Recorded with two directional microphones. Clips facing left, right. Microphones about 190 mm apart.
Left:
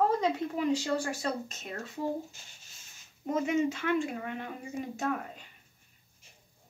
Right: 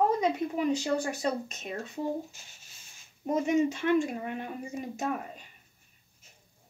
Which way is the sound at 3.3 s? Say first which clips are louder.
Right 2 dB; 15° right (ahead or behind).